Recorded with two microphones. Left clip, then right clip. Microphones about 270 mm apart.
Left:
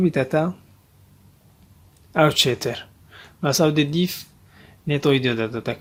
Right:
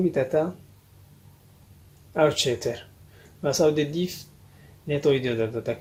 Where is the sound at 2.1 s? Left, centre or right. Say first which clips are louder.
Left 4 dB; left.